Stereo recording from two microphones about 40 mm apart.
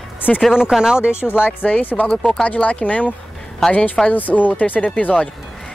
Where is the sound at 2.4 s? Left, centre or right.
Left.